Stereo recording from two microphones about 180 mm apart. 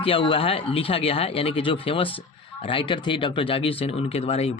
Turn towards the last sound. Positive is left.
turn(degrees=35)  # may be behind; listen again after turning